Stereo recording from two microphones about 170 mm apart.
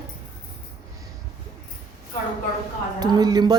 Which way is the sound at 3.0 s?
25° right (ahead or behind).